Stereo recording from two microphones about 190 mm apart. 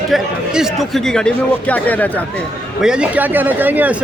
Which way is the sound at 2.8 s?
5° right (ahead or behind).